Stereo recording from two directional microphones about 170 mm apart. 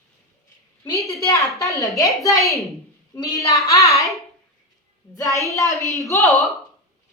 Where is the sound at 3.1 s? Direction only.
20° left (ahead or behind).